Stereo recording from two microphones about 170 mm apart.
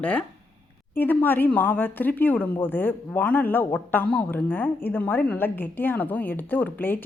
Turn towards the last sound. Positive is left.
turn(degrees=10)  # may be behind; listen again after turning